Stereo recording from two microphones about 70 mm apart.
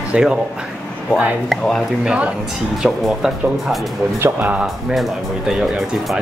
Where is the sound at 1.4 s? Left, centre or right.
Centre.